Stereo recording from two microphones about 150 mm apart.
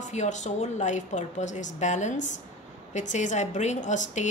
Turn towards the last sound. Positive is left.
turn(degrees=55)  # may be behind; listen again after turning